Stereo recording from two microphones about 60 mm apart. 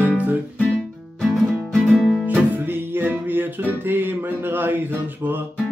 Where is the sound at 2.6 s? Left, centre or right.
Right.